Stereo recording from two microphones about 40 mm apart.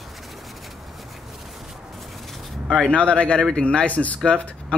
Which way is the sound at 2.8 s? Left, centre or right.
Left.